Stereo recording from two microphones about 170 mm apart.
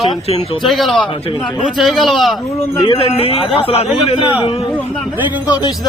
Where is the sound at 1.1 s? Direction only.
30° left (ahead or behind).